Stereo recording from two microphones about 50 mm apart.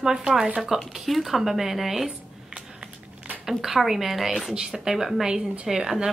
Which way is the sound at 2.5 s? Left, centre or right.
Right.